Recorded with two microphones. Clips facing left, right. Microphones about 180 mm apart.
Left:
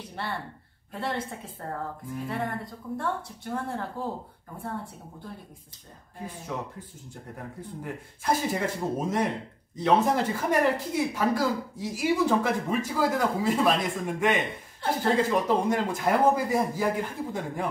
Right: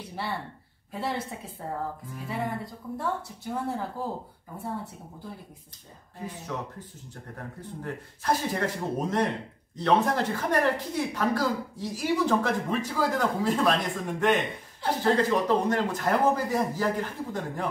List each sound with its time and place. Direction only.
0.1 s speech: 5° right (ahead or behind)
2.2 s speech: centre (ahead or behind)
6.2 s speech: 10° left (ahead or behind)